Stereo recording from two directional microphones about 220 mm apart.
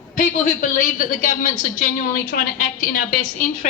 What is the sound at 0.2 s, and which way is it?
A woman's voice, 35° left (ahead or behind).